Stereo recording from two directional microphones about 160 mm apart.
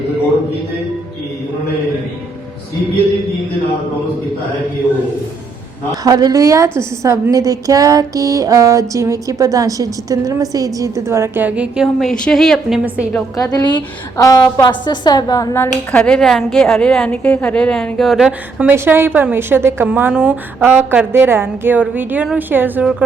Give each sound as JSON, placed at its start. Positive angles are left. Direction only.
{"t": 6.0, "sound": "a woman's voice", "side_deg": -25}
{"t": 13.3, "sound": "a woman's voice", "side_deg": 25}